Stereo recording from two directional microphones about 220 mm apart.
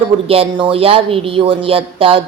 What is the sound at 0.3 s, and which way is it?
Speech, 25° right (ahead or behind).